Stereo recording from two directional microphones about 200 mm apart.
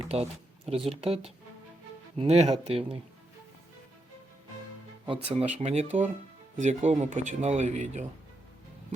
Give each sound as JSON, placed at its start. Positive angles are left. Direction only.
{"t": 0.1, "sound": "speech", "side_deg": -30}
{"t": 5.0, "sound": "speech", "side_deg": -30}